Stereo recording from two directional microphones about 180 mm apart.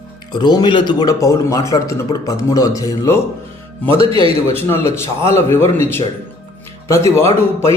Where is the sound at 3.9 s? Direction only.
30° right (ahead or behind).